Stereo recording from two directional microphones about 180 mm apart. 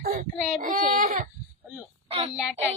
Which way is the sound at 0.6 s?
45° right (ahead or behind).